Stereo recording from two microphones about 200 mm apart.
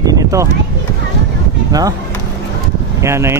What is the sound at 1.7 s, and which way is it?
Speech, 20° right (ahead or behind).